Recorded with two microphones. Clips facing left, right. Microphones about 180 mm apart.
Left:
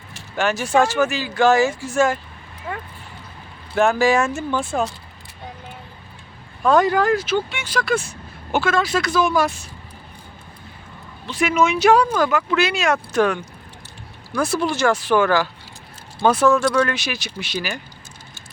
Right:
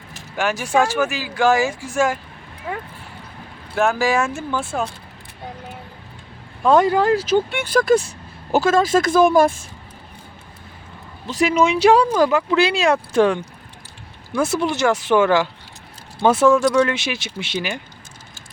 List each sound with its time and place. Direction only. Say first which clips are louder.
0.3 s speech: left 1 dB; 10° right (ahead or behind)
3.8 s speech: left 2 dB; 5° right (ahead or behind)
6.6 s speech: right 1 dB; 25° right (ahead or behind)
7.3 s speech: right 4 dB; 50° right (ahead or behind)
11.3 s speech: right 2 dB; 35° right (ahead or behind)